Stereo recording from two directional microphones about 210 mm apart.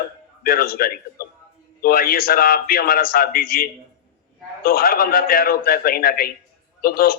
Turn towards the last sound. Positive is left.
turn(degrees=45)  # may be behind; listen again after turning